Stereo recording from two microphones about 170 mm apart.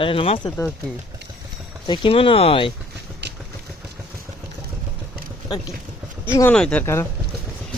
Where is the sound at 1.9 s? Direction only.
30° left (ahead or behind).